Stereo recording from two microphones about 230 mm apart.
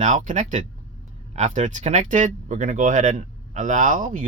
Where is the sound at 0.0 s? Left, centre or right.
Right.